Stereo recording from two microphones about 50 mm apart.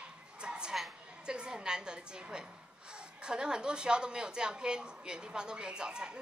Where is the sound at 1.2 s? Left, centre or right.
Centre.